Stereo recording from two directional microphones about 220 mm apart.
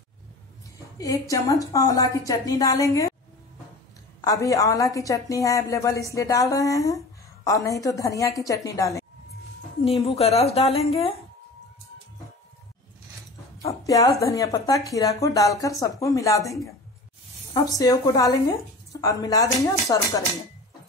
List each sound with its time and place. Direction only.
0.7 s a woman's voice: 15° left (ahead or behind)
4.2 s a woman's voice: 15° left (ahead or behind)
10.0 s a woman's voice: 25° left (ahead or behind)
13.6 s a sound: 15° left (ahead or behind)
14.2 s a woman's voice: 15° left (ahead or behind)
17.6 s a woman's voice: 15° left (ahead or behind)